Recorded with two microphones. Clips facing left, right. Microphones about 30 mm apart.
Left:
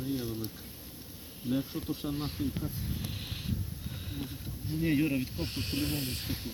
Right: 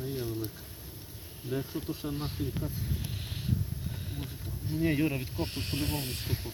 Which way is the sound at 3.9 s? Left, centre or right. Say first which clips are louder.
Right 1 dB; centre.